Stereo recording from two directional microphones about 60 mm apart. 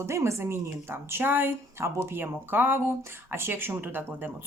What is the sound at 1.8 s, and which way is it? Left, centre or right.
Speech, right.